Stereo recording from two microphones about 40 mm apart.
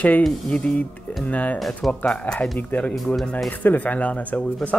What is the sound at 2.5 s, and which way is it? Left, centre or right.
Speech, left.